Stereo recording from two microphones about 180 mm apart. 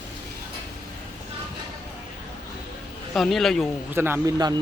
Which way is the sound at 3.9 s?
15° right (ahead or behind).